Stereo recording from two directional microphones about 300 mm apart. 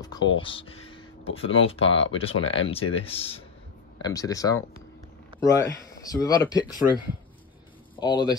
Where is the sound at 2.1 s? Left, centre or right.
Centre.